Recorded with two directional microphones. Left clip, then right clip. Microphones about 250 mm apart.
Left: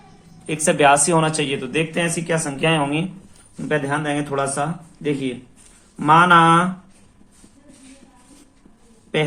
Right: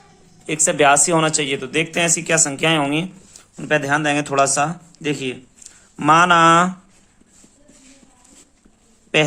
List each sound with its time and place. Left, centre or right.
0.4 s speech: right
3.7 s speech: right